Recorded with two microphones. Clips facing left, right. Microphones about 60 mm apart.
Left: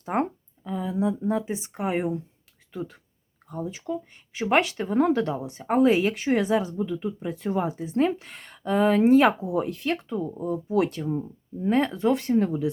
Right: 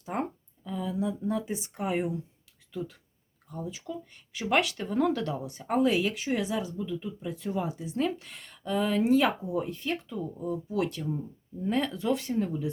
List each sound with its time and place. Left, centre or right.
0.0 s a sound: left
0.7 s speech: left
9.4 s speech: left
10.1 s speech: left
10.4 s speech: left
12.4 s speech: left